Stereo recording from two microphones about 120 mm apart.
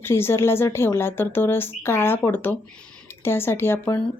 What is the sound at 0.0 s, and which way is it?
Speech, 20° left (ahead or behind).